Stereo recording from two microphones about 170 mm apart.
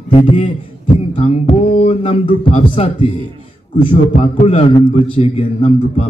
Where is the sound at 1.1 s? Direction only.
40° left (ahead or behind).